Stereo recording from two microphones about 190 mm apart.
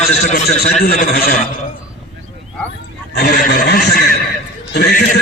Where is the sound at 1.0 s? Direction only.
55° left (ahead or behind).